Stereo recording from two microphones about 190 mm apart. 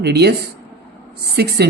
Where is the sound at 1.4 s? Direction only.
60° right (ahead or behind).